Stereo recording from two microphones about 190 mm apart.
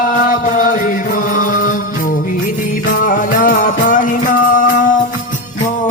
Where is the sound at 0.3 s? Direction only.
45° left (ahead or behind).